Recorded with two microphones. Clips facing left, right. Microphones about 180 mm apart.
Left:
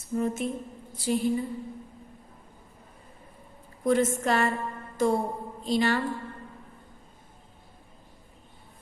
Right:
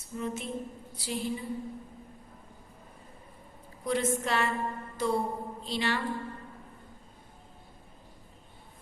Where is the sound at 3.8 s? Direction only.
50° left (ahead or behind).